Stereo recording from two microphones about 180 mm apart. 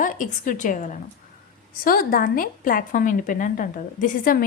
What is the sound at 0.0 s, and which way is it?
A woman's voice, 45° left (ahead or behind).